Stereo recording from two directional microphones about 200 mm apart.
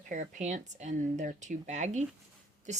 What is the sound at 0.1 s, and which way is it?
A woman's voice, 35° right (ahead or behind).